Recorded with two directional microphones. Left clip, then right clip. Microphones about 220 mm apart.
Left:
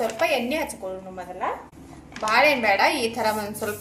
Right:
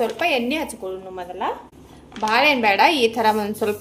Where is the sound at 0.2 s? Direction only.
45° right (ahead or behind).